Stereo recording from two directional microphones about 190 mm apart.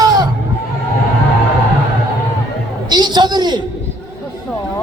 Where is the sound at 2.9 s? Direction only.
20° right (ahead or behind).